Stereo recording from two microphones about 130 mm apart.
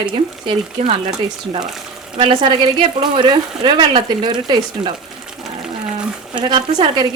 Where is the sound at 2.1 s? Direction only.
40° right (ahead or behind).